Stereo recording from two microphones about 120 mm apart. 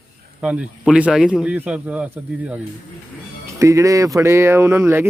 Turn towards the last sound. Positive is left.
turn(degrees=-20)  # may be behind; listen again after turning